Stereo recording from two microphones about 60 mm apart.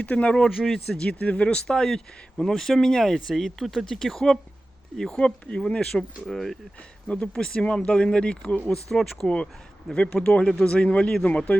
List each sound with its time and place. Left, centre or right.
0.0 s speech: left
0.4 s speech: centre
0.9 s speech: centre
5.8 s speech: centre
7.1 s speech: centre
8.6 s speech: centre